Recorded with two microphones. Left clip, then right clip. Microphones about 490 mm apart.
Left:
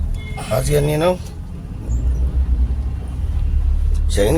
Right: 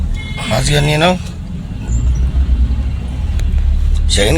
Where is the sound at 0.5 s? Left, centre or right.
Left.